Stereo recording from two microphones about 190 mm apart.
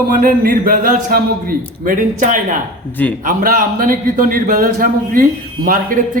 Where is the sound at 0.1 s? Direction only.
45° right (ahead or behind).